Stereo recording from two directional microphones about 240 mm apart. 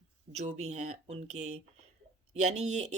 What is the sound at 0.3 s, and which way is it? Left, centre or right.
Speech, right.